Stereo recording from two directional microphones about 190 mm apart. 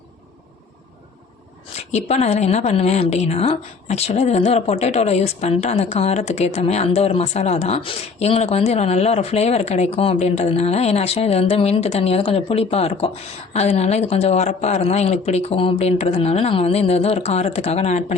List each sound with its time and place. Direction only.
1.7 s a woman's voice: 35° left (ahead or behind)